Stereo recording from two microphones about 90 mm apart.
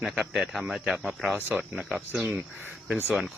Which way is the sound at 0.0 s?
5° right (ahead or behind).